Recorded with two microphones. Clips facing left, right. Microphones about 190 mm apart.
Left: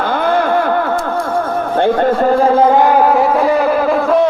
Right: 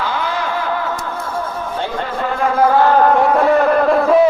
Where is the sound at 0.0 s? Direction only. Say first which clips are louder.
Left 7 dB; 55° left (ahead or behind).